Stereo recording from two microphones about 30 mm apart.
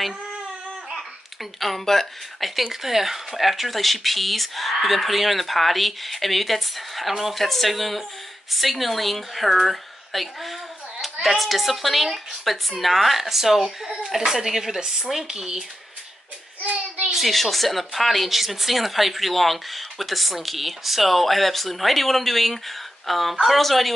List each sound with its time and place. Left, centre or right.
0.8 s a sound: centre
2.4 s speech: centre
7.3 s a woman's voice: centre
16.6 s child singing: right
17.1 s speech: centre